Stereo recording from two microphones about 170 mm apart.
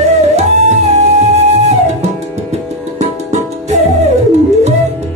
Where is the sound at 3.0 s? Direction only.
45° right (ahead or behind).